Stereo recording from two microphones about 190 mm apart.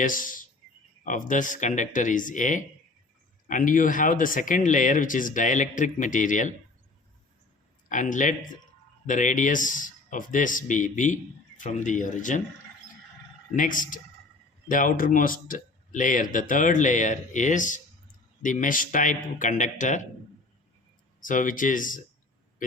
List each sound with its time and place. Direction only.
0.0 s speech: 45° left (ahead or behind)
7.9 s speech: 40° left (ahead or behind)
13.6 s speech: 45° left (ahead or behind)
21.2 s speech: 45° left (ahead or behind)